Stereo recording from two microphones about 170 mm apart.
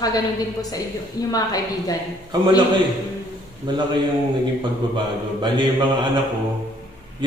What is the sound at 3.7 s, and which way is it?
Mantra, 25° right (ahead or behind).